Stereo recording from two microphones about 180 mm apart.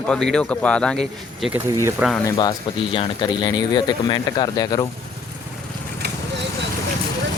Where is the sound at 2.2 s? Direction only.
25° left (ahead or behind).